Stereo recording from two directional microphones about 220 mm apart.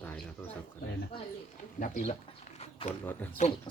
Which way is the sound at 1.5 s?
35° left (ahead or behind).